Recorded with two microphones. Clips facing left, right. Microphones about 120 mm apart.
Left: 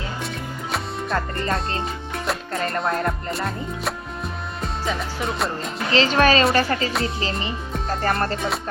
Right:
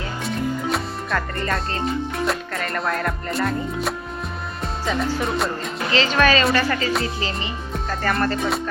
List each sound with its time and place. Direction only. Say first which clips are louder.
1.1 s music: even; 25° left (ahead or behind)
1.8 s music: right 5 dB; centre (ahead or behind)
2.7 s music: even; 30° left (ahead or behind)
3.3 s speech: right 4 dB; centre (ahead or behind)
4.6 s music: right 3 dB; centre (ahead or behind)
5.9 s speech: left 1 dB; 35° left (ahead or behind)
7.9 s music: even; 35° left (ahead or behind)